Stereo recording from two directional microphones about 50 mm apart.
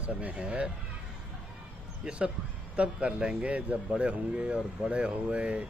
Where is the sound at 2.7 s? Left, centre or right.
Right.